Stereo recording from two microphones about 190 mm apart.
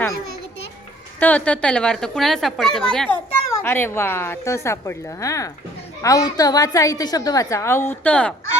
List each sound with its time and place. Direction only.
1.2 s a woman's voice: 10° left (ahead or behind)